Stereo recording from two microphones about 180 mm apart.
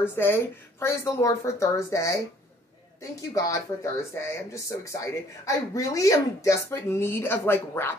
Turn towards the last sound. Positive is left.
turn(degrees=10)  # may be behind; listen again after turning